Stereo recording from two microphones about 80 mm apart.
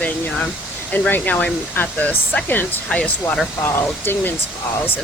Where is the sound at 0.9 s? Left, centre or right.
Left.